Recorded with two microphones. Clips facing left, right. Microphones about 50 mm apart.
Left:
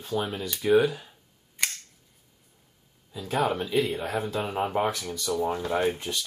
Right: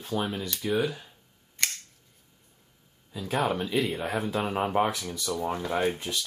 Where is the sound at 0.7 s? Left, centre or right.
Centre.